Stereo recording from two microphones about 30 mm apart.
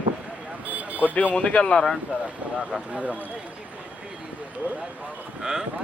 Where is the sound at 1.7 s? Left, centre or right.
Left.